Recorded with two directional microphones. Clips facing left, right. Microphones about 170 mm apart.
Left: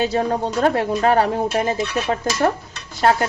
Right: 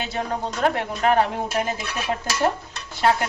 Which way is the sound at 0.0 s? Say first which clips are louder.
Left 7 dB; 35° left (ahead or behind).